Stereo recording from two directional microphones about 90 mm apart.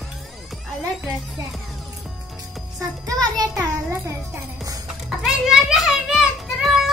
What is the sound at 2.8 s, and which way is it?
Speech, 45° right (ahead or behind).